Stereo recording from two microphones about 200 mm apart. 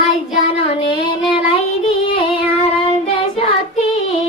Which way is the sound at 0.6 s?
30° left (ahead or behind).